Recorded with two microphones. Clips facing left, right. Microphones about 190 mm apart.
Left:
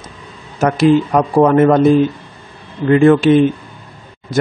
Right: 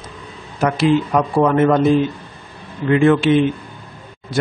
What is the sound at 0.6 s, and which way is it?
Speech, 45° left (ahead or behind).